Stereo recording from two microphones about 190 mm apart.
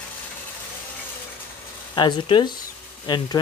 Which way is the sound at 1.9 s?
25° left (ahead or behind).